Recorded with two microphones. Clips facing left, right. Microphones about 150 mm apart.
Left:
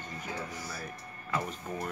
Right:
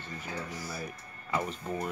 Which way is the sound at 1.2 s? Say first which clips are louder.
Right 2 dB; 5° right (ahead or behind).